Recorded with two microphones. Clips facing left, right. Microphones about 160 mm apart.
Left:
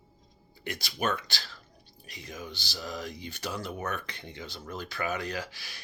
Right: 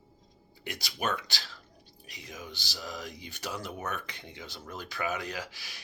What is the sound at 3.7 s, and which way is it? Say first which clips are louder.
Speech: left 2 dB; 5° right (ahead or behind).